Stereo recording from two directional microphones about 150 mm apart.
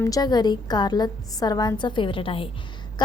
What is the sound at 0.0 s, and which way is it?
A woman's voice, 25° left (ahead or behind).